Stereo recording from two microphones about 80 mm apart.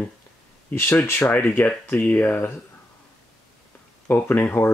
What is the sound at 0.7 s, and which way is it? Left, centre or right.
Speech, left.